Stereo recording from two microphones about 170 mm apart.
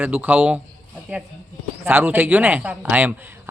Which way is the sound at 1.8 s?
10° right (ahead or behind).